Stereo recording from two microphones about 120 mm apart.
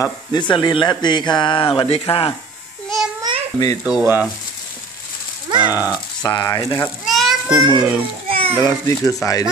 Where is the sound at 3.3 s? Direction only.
35° right (ahead or behind).